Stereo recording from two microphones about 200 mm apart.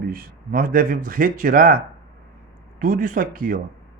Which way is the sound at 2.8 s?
45° right (ahead or behind).